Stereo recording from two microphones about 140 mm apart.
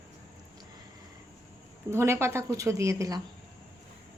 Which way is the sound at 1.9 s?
20° right (ahead or behind).